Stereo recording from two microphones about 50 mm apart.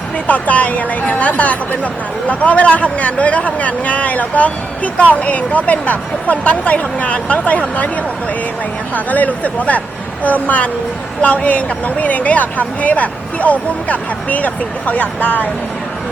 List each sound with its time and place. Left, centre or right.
0.3 s speech: left
9.0 s speech: left